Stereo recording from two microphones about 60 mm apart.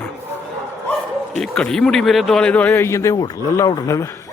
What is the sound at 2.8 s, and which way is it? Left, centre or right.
A man's voice, left.